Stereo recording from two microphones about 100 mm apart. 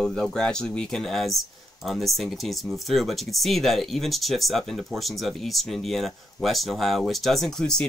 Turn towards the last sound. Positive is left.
turn(degrees=5)  # may be behind; listen again after turning